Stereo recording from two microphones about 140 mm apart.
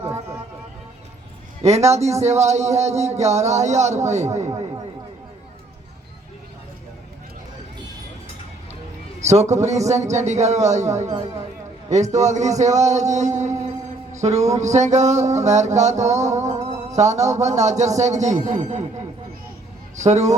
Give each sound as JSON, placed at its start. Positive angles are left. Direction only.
{"t": 1.6, "sound": "speech", "side_deg": -50}
{"t": 9.2, "sound": "music", "side_deg": -55}
{"t": 12.1, "sound": "music", "side_deg": -55}
{"t": 20.0, "sound": "music", "side_deg": -55}